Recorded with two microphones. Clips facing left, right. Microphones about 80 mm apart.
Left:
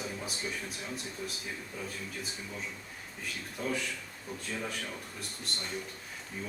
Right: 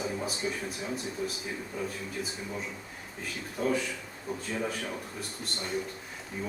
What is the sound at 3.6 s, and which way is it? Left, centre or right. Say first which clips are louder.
A man's voice: right 6 dB; centre.